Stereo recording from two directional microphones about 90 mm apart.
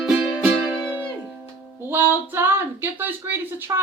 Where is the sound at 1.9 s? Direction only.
20° right (ahead or behind).